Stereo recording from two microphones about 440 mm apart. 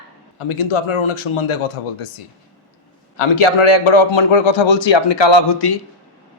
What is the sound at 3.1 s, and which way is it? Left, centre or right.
A man's voice, left.